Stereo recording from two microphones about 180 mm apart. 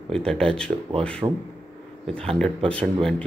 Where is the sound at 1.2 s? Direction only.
20° right (ahead or behind).